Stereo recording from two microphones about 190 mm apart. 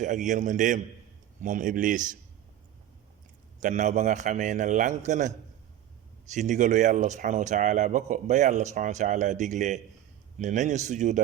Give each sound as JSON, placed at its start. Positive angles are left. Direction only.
{"t": 0.0, "sound": "a man's voice", "side_deg": -40}
{"t": 3.6, "sound": "speech", "side_deg": -40}
{"t": 6.3, "sound": "speech", "side_deg": -40}